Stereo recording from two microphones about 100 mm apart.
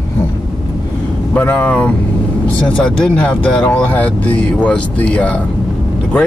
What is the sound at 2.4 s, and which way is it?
Speech, 10° left (ahead or behind).